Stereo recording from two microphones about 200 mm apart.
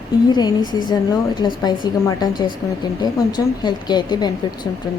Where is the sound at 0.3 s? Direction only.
20° left (ahead or behind).